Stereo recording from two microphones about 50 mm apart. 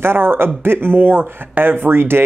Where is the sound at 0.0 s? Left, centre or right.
Right.